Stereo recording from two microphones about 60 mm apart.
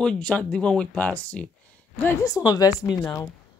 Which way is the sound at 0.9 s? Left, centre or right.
Left.